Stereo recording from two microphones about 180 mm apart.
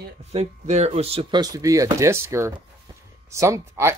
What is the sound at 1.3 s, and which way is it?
Speech, 20° right (ahead or behind).